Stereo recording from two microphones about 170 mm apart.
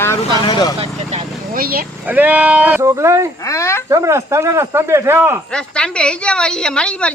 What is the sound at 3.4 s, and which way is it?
Speech, 15° left (ahead or behind).